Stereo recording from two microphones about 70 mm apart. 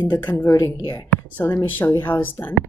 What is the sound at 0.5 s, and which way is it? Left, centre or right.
Speech, left.